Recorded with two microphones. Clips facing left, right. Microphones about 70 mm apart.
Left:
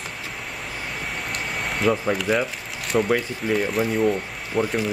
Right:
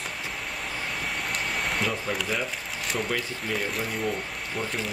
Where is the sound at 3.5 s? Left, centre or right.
Centre.